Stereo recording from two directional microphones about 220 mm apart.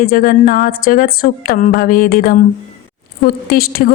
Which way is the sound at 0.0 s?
40° left (ahead or behind).